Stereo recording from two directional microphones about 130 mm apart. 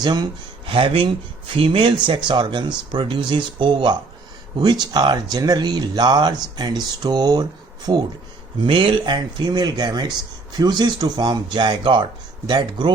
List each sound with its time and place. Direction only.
0.0 s speech: 35° right (ahead or behind)